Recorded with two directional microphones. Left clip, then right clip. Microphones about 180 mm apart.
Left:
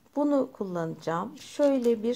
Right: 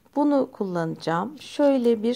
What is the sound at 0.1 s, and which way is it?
Speech, 30° right (ahead or behind).